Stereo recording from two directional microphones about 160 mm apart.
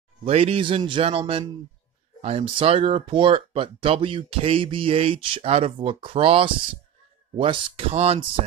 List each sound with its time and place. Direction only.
0.2 s speech: 40° right (ahead or behind)